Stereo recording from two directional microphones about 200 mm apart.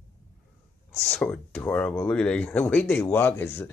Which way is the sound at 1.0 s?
5° left (ahead or behind).